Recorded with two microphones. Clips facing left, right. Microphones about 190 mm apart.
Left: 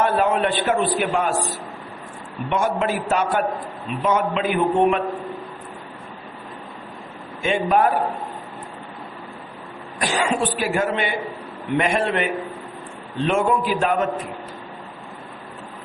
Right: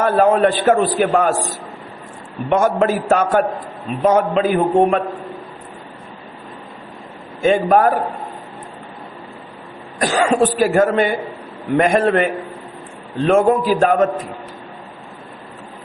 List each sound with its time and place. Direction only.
0.0 s a man's voice: 40° right (ahead or behind)
2.5 s a man's voice: 45° right (ahead or behind)
7.4 s a man's voice: 40° right (ahead or behind)
10.0 s a man's voice: 45° right (ahead or behind)